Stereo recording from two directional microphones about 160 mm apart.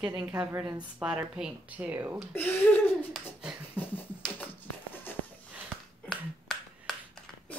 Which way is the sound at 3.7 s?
10° left (ahead or behind).